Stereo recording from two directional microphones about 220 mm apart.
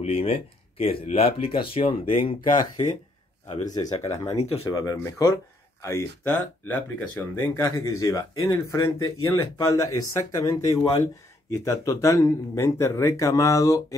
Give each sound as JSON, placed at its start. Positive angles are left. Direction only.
{"t": 0.0, "sound": "speech", "side_deg": 25}
{"t": 3.7, "sound": "speech", "side_deg": 15}